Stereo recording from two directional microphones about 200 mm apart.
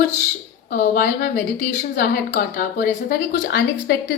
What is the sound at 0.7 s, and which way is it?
A woman's voice, 45° left (ahead or behind).